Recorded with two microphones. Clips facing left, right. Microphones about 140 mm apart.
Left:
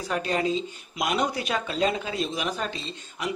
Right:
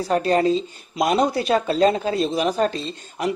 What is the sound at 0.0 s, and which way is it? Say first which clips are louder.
Speech: right 8 dB; 40° right (ahead or behind).